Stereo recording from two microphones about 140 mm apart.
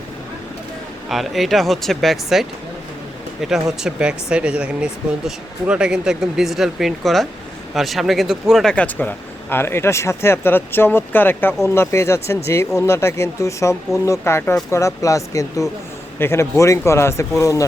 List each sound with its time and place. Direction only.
1.0 s speech: centre (ahead or behind); by 17.7 s 20° left (ahead or behind)